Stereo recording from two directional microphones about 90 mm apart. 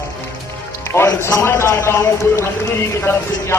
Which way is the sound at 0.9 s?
30° left (ahead or behind).